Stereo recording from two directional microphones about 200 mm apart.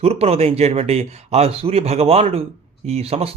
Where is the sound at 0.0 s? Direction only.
30° right (ahead or behind).